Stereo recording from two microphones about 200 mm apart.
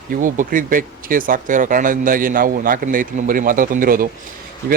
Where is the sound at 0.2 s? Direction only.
40° right (ahead or behind).